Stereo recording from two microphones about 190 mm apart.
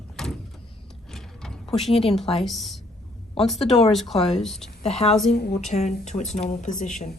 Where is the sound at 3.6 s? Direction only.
30° left (ahead or behind).